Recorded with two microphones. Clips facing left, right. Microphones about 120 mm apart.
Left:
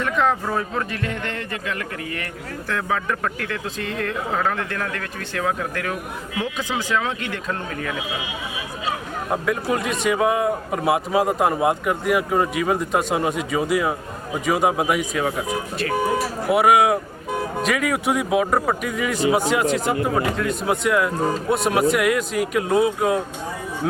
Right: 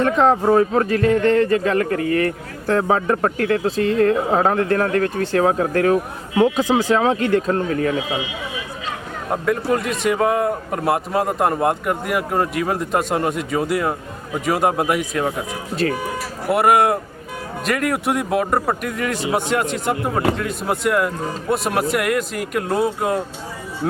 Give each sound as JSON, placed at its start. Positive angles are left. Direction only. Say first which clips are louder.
{"t": 0.0, "sound": "speech", "louder": "right 6 dB", "side_deg": -35}
{"t": 9.3, "sound": "a man's voice", "louder": "right 3 dB", "side_deg": 0}
{"t": 15.8, "sound": "speech", "louder": "right 5 dB", "side_deg": -35}
{"t": 16.5, "sound": "a man's voice", "louder": "right 1 dB", "side_deg": 0}